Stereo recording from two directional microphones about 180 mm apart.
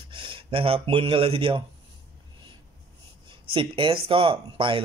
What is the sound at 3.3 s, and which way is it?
Speech, 30° right (ahead or behind).